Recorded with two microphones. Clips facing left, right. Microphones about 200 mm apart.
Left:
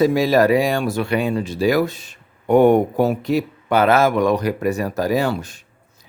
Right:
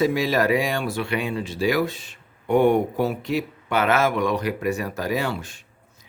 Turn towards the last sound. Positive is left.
turn(degrees=40)  # may be behind; listen again after turning